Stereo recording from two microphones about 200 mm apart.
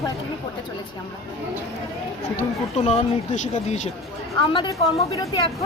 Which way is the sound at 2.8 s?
30° left (ahead or behind).